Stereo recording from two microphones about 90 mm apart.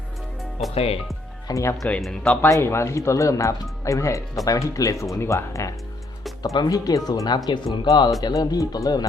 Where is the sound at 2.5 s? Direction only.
30° left (ahead or behind).